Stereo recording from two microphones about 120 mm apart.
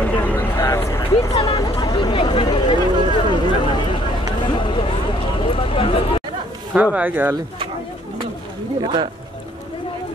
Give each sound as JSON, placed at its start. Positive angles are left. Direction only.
{"t": 0.0, "sound": "a sound", "side_deg": 15}
{"t": 6.7, "sound": "speech", "side_deg": -10}
{"t": 8.8, "sound": "speech", "side_deg": -40}